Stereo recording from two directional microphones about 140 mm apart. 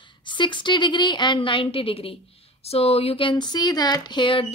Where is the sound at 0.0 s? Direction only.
35° left (ahead or behind).